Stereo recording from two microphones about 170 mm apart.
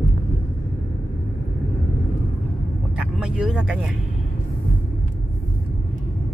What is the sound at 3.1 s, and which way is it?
Vehicle, 5° right (ahead or behind).